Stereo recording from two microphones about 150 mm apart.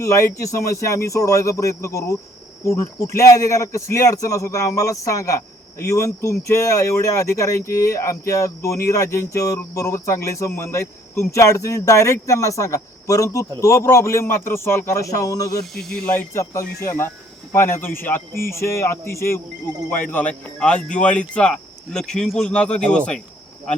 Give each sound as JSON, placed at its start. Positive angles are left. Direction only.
{"t": 0.0, "sound": "a man's voice", "side_deg": 20}
{"t": 15.7, "sound": "speech", "side_deg": 0}
{"t": 16.1, "sound": "a man's voice", "side_deg": 20}